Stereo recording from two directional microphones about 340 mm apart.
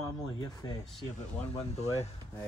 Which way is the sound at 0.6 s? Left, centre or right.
Centre.